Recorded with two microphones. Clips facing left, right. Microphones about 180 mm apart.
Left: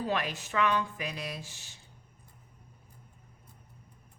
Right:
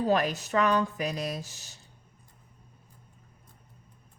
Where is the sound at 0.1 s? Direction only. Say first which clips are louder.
Right 7 dB; 40° right (ahead or behind).